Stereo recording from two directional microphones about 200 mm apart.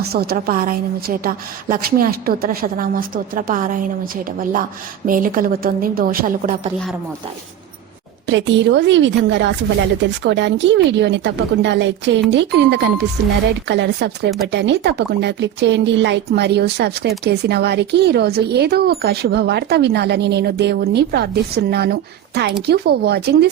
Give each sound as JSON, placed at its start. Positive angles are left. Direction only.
{"t": 0.1, "sound": "a woman's voice", "side_deg": -50}
{"t": 8.3, "sound": "speech", "side_deg": -65}